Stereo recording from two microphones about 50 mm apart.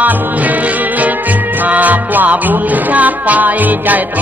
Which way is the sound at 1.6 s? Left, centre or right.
Right.